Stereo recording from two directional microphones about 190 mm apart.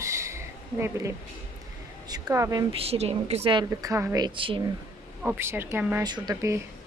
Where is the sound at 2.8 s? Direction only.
35° right (ahead or behind).